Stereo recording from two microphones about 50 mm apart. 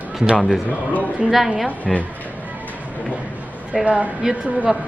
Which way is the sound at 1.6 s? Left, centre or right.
Left.